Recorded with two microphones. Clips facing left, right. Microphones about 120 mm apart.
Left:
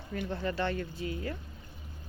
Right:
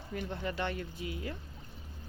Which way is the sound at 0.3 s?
15° right (ahead or behind).